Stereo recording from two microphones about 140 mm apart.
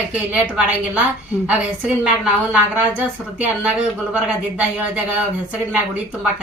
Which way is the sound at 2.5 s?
10° right (ahead or behind).